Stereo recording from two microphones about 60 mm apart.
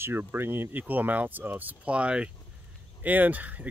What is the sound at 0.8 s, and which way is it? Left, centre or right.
Speech, right.